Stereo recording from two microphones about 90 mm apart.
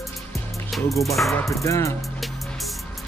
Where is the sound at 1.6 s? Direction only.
35° left (ahead or behind).